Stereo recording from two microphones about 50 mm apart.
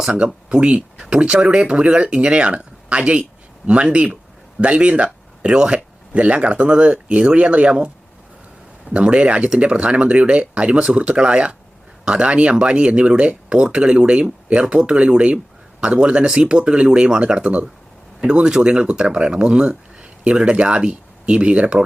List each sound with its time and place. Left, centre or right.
0.6 s speech: right
8.9 s speech: right